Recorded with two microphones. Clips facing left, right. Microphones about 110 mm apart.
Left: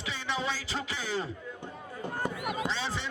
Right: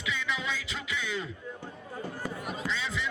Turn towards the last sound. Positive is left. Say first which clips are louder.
# even
turn(degrees=35)  # may be behind; listen again after turning